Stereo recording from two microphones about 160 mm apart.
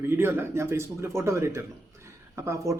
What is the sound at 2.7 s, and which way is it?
Speech, 20° right (ahead or behind).